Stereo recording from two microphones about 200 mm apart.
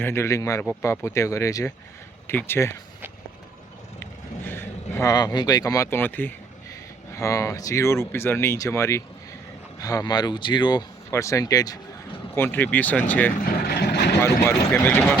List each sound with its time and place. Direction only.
0.0 s speech: 15° left (ahead or behind)
0.6 s speech: 5° left (ahead or behind)
0.9 s speech: 15° left (ahead or behind)
4.0 s vehicle: 10° left (ahead or behind)
7.1 s speech: 15° left (ahead or behind)
13.4 s vehicle: 45° left (ahead or behind)
14.2 s speech: 10° left (ahead or behind)